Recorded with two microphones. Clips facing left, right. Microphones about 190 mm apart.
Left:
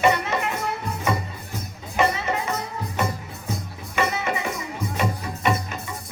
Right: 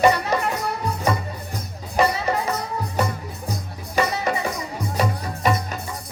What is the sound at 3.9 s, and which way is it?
Music, 35° right (ahead or behind).